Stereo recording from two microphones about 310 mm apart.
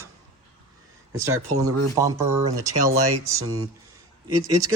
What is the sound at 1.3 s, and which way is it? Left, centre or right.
Speech, right.